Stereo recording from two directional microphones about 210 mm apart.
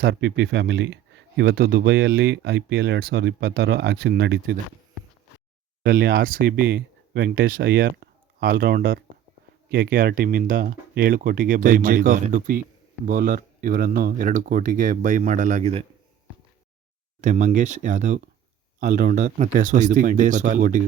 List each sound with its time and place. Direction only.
0.0 s speech: 55° right (ahead or behind)
5.8 s speech: 45° right (ahead or behind); by 15.9 s 30° right (ahead or behind)
17.2 s speech: 35° right (ahead or behind)